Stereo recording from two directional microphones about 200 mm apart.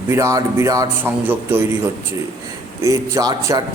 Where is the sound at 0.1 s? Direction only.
15° right (ahead or behind).